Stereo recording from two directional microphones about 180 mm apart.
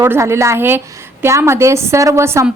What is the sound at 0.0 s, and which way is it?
A woman's voice, 15° right (ahead or behind).